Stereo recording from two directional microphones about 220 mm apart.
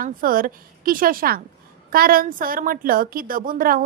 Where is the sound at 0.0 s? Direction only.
40° right (ahead or behind).